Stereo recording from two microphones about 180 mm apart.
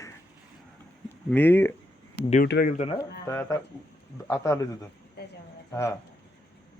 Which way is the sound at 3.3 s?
15° left (ahead or behind).